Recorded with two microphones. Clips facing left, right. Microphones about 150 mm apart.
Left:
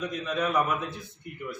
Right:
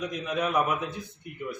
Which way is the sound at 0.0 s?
15° right (ahead or behind).